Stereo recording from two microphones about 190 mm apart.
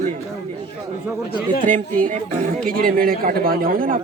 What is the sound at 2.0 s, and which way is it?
Speech, 45° right (ahead or behind).